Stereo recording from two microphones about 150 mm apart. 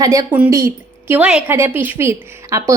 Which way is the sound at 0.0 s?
20° right (ahead or behind).